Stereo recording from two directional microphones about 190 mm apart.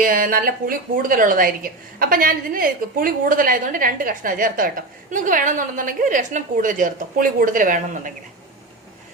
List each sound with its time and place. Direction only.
0.0 s a woman's voice: 45° right (ahead or behind)